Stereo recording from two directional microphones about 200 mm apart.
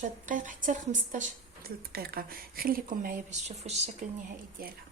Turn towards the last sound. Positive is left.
turn(degrees=-40)  # may be behind; listen again after turning